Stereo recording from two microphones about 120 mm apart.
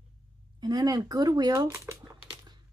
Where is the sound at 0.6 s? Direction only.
35° right (ahead or behind).